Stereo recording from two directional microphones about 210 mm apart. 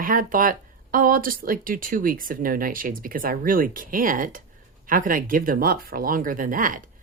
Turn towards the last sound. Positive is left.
turn(degrees=-40)  # may be behind; listen again after turning